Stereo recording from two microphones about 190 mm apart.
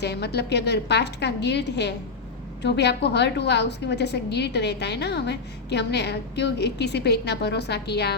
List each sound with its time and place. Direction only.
0.0 s a woman's voice: 60° left (ahead or behind)